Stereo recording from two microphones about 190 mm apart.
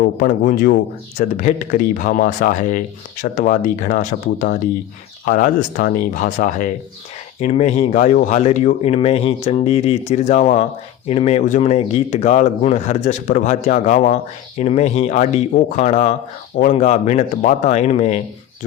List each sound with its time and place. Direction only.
0.0 s speech: 45° left (ahead or behind)